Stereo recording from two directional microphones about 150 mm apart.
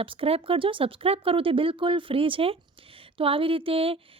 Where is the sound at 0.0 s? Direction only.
35° right (ahead or behind).